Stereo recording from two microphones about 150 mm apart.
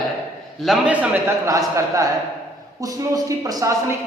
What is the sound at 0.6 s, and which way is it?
Speech, centre (ahead or behind).